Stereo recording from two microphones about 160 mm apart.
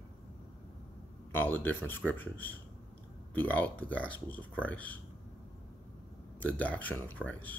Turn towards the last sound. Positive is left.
turn(degrees=10)  # may be behind; listen again after turning